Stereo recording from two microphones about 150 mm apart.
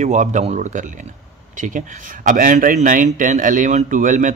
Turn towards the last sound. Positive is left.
turn(degrees=-60)  # may be behind; listen again after turning